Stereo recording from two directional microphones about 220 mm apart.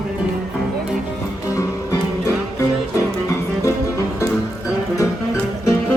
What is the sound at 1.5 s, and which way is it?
Music, 15° left (ahead or behind).